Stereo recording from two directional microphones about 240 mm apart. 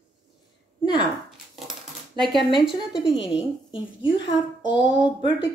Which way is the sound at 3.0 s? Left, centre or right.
Left.